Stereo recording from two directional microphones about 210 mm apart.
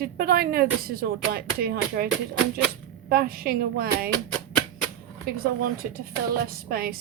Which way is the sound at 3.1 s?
45° right (ahead or behind).